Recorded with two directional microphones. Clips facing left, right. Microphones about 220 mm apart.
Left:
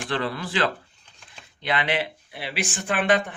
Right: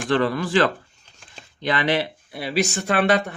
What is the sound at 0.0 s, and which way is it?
Speech, 45° right (ahead or behind).